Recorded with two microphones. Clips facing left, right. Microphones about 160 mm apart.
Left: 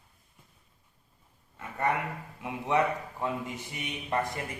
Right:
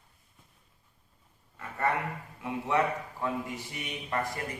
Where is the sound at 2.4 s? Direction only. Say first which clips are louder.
Left 1 dB; 20° left (ahead or behind).